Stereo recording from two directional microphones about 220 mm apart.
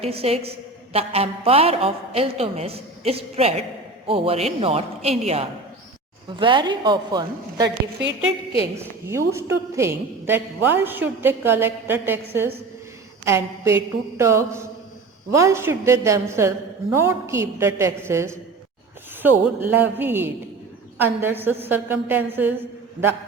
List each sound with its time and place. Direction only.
0.0 s a woman's voice: 25° right (ahead or behind)
8.8 s a woman's voice: 10° right (ahead or behind)